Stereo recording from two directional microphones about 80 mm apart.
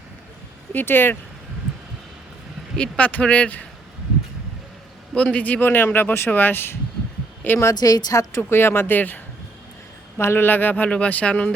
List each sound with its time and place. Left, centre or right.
0.7 s speech: left
2.7 s speech: centre
5.1 s a woman's voice: centre
7.7 s a woman's voice: left
8.4 s speech: left